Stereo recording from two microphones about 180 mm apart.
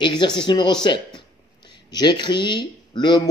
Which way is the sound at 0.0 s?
25° left (ahead or behind).